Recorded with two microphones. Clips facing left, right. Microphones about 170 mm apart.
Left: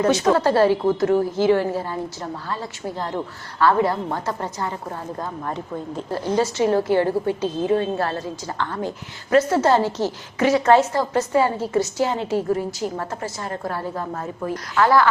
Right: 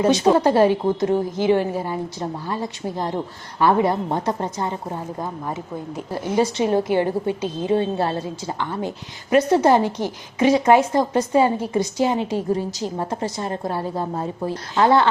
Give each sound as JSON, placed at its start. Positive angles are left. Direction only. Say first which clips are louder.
{"t": 0.0, "sound": "a woman's voice", "louder": "right 2 dB", "side_deg": -20}
{"t": 14.0, "sound": "a woman's voice", "louder": "right 3 dB", "side_deg": -30}